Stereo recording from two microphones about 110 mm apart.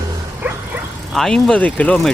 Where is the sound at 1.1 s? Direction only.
5° left (ahead or behind).